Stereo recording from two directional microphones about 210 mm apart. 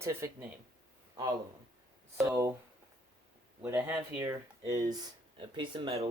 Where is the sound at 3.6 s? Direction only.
10° right (ahead or behind); by 6.1 s 25° right (ahead or behind).